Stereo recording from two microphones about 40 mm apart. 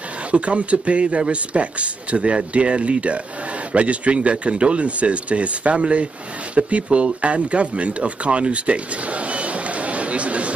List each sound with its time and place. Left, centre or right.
0.3 s speech: right